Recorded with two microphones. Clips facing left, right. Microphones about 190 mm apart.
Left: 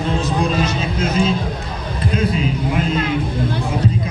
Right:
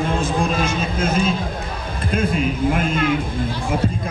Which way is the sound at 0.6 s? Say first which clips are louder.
Left 1 dB; 50° right (ahead or behind).